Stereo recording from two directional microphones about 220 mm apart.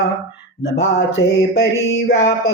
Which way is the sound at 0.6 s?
50° left (ahead or behind).